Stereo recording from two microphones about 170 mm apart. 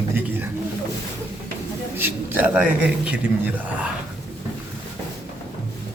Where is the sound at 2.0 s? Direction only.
10° right (ahead or behind).